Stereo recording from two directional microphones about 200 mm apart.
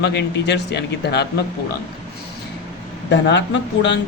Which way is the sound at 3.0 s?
60° left (ahead or behind).